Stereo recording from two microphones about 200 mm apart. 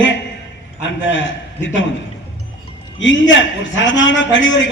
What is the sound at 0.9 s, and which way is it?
Speech, 65° left (ahead or behind).